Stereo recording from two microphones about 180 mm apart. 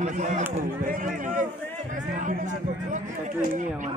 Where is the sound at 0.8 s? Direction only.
50° right (ahead or behind).